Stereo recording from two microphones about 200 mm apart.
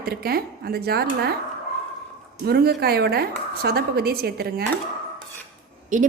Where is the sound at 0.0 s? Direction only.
50° right (ahead or behind).